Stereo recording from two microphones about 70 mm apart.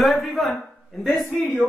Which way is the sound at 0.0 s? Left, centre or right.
Centre.